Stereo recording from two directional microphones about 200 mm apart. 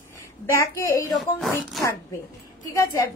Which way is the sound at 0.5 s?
15° left (ahead or behind).